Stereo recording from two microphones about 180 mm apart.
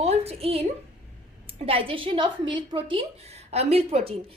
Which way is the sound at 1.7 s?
30° right (ahead or behind).